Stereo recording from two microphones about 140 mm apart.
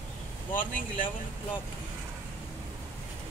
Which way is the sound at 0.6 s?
70° left (ahead or behind).